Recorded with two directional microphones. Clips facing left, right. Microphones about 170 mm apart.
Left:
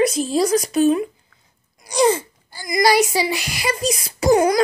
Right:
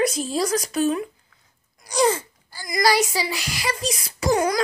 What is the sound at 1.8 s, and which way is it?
Gasp, 20° left (ahead or behind).